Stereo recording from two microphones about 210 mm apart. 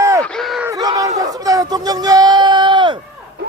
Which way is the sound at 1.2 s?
15° right (ahead or behind).